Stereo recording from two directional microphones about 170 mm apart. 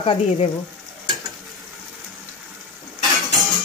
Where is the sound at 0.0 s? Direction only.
30° left (ahead or behind).